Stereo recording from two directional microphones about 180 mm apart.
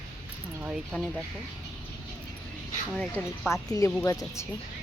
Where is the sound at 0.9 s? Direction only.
Centre (ahead or behind).